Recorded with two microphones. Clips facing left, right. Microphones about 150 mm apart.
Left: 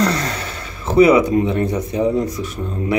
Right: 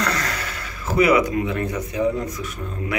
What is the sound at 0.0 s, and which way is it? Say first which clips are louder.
Speech: left 6 dB; 25° left (ahead or behind).